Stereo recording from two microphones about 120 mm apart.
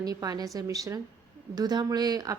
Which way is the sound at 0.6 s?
30° right (ahead or behind).